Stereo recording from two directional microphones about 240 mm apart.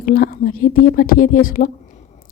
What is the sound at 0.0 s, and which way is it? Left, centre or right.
Speech, left.